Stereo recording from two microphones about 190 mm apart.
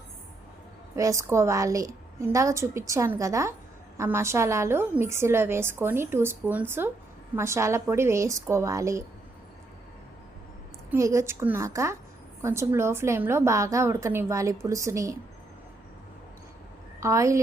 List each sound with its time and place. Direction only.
0.9 s a woman's voice: 15° right (ahead or behind)
10.9 s a woman's voice: 15° right (ahead or behind)
17.0 s a woman's voice: 15° right (ahead or behind)